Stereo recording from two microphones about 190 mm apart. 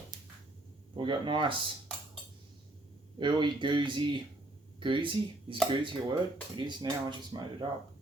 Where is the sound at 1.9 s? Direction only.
5° left (ahead or behind).